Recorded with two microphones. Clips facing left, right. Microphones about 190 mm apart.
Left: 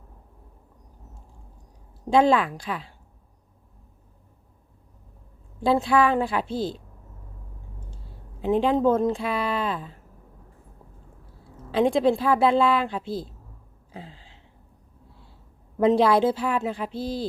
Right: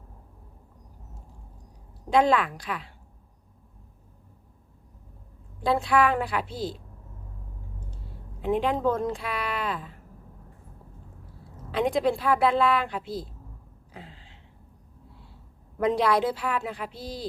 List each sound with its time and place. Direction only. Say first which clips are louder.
2.0 s a woman's voice: left 3 dB; 30° left (ahead or behind)
5.6 s a woman's voice: left 3 dB; 25° left (ahead or behind)
8.4 s a woman's voice: left 4 dB; 30° left (ahead or behind)
11.7 s a woman's voice: left 4 dB; 30° left (ahead or behind)
13.9 s a sound: left 4 dB; 30° left (ahead or behind)
15.8 s a woman's voice: left 5 dB; 25° left (ahead or behind)